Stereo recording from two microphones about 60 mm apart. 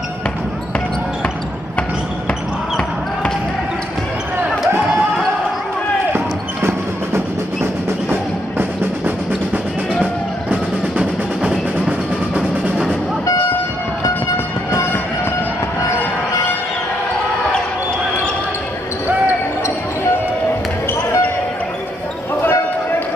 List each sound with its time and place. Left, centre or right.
8.1 s music: right
10.5 s music: centre
14.0 s music: left
22.4 s basketball bounce: left